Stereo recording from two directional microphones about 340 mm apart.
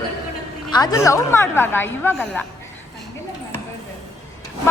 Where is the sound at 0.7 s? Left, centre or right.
Centre.